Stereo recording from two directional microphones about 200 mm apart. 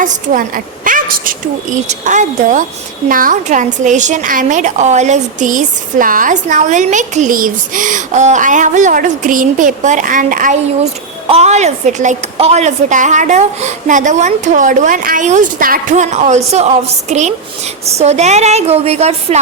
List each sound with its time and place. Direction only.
0.0 s speech: 40° right (ahead or behind)